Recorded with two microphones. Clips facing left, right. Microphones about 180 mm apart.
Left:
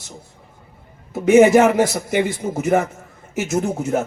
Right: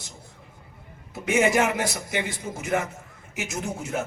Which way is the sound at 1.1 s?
50° left (ahead or behind).